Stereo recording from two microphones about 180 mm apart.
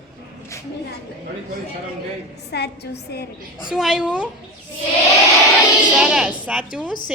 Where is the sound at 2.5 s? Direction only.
65° left (ahead or behind).